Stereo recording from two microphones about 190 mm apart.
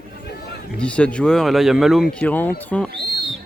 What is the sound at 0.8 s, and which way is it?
Speech, 5° left (ahead or behind).